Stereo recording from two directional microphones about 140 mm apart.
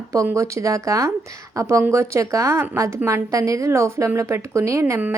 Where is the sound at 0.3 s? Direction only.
20° right (ahead or behind).